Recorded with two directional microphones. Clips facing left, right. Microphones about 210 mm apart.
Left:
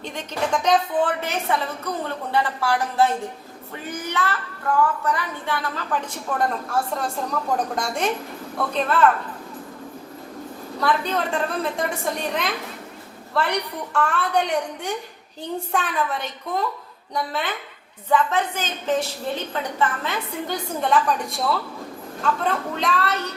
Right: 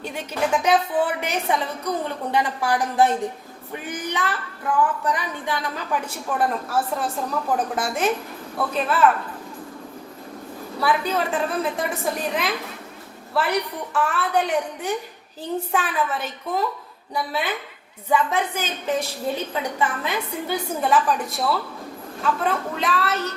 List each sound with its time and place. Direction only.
0.0 s a woman's voice: 10° right (ahead or behind)
10.8 s a woman's voice: 5° right (ahead or behind)